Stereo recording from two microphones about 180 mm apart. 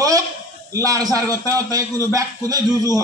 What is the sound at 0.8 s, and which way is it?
A man's voice, 20° right (ahead or behind).